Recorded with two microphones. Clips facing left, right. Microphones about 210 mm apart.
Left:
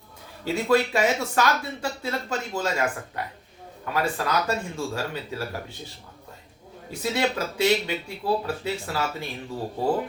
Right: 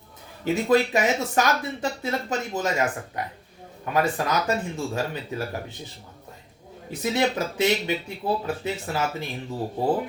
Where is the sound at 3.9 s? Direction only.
20° right (ahead or behind).